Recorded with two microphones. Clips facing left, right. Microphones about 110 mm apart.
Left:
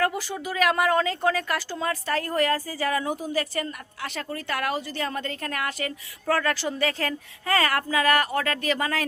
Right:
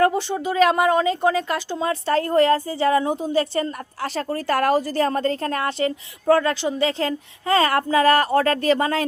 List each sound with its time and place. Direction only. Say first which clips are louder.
0.0 s speech: right 7 dB; 25° right (ahead or behind)